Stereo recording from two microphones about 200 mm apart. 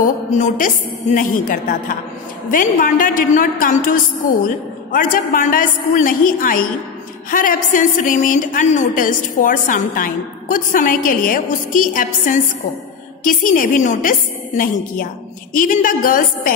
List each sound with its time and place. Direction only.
0.0 s a woman's voice: 40° left (ahead or behind)
15.5 s a woman's voice: 45° left (ahead or behind)